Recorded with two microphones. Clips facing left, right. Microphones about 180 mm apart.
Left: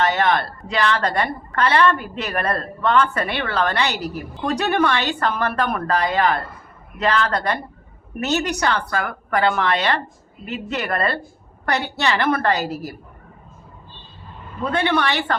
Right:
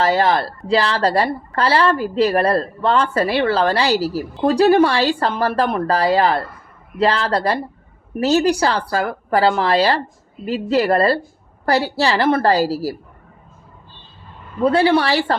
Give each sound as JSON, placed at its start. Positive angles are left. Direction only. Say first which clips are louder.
{"t": 0.0, "sound": "a woman's voice", "louder": "right 3 dB", "side_deg": -30}
{"t": 14.6, "sound": "a woman's voice", "louder": "right 6 dB", "side_deg": -30}